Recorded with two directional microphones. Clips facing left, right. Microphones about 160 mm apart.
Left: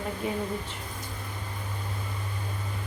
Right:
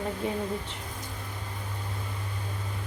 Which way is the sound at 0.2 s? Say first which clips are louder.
Left 1 dB; 30° right (ahead or behind).